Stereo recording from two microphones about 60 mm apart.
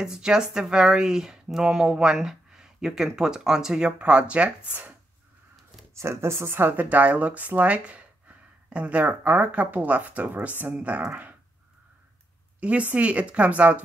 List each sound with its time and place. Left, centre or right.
0.0 s speech: centre
5.9 s speech: right
12.5 s speech: right